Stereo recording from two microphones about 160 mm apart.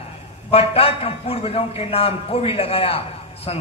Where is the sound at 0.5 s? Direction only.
40° left (ahead or behind).